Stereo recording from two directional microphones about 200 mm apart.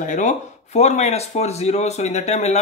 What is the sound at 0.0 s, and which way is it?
Speech, 40° left (ahead or behind).